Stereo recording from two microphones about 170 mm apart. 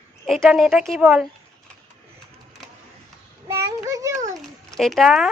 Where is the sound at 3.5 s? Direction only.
15° right (ahead or behind).